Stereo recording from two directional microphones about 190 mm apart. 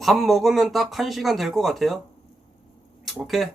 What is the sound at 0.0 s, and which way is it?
Speech, centre (ahead or behind).